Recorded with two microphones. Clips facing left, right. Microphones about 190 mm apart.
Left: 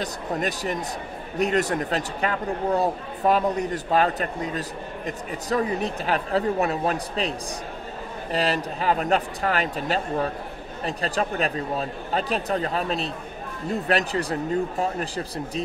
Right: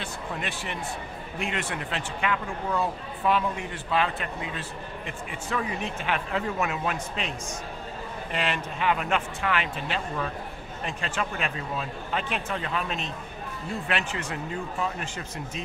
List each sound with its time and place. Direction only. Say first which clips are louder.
0.0 s speech: left 7 dB; 40° left (ahead or behind)